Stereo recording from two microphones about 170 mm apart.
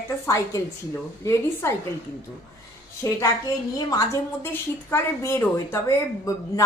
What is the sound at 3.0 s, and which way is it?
A woman's voice, 20° left (ahead or behind).